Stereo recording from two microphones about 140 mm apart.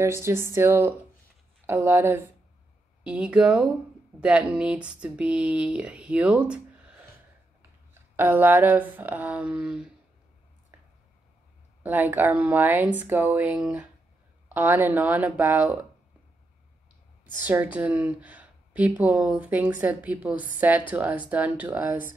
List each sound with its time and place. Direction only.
0.0 s a woman's voice: 20° right (ahead or behind)
8.2 s a woman's voice: 15° right (ahead or behind)
11.8 s a woman's voice: 10° right (ahead or behind)
17.4 s a woman's voice: 10° right (ahead or behind)